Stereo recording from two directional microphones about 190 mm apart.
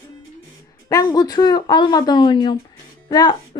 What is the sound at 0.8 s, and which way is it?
A woman's voice, 20° left (ahead or behind).